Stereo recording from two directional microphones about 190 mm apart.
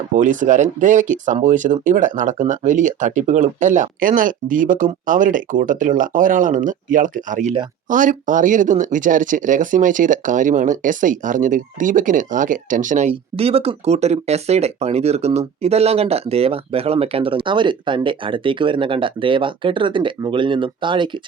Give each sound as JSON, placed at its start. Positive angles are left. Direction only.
{"t": 0.1, "sound": "speech", "side_deg": -40}